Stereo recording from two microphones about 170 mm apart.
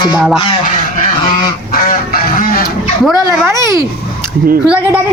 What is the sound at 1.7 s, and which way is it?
Goose, 60° left (ahead or behind).